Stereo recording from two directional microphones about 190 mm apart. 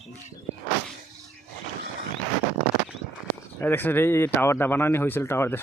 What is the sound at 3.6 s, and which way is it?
Speech, 10° left (ahead or behind).